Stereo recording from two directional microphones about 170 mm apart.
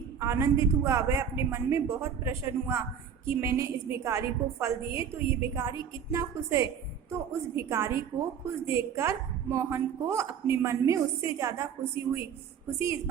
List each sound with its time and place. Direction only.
0.2 s a woman's voice: 15° right (ahead or behind)